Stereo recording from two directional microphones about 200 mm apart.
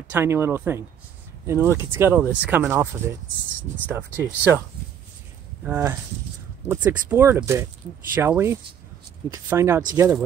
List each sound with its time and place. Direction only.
0.1 s speech: 10° right (ahead or behind)
5.6 s speech: 15° right (ahead or behind)